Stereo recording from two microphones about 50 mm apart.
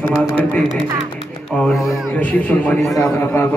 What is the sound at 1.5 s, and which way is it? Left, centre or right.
A man's voice, left.